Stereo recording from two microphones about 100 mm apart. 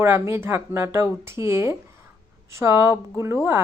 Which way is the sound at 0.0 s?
25° right (ahead or behind).